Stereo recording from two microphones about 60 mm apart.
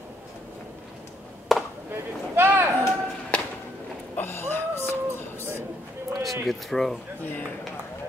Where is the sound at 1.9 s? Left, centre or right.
Right.